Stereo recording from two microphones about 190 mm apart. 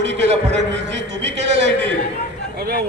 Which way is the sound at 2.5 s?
50° right (ahead or behind).